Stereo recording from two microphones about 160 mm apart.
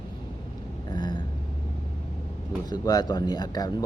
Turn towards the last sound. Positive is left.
turn(degrees=25)  # may be behind; listen again after turning